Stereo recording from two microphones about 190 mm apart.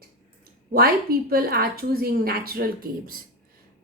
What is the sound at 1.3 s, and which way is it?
A woman's voice, 55° right (ahead or behind).